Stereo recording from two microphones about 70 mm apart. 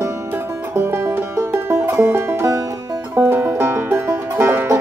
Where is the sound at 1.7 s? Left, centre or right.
Right.